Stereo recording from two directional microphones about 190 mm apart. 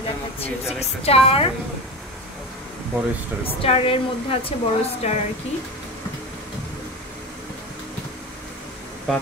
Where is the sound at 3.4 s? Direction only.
30° left (ahead or behind).